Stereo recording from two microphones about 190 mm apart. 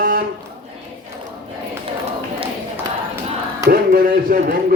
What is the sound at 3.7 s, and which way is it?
Speech, 50° right (ahead or behind).